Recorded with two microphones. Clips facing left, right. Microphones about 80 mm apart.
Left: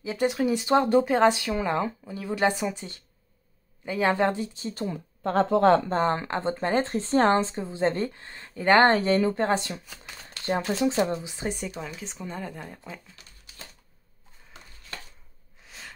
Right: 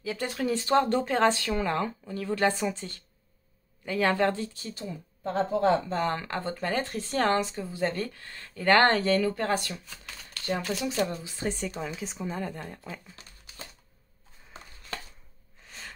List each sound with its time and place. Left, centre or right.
0.0 s speech: left
4.7 s speech: left
5.9 s speech: left; by 11.7 s centre
11.7 s speech: centre
15.6 s snort: centre